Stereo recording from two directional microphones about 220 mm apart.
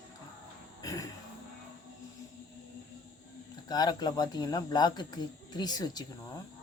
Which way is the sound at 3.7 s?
20° left (ahead or behind).